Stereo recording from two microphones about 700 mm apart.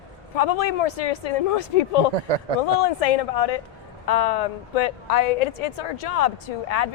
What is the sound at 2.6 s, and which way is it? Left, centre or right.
Speech, left.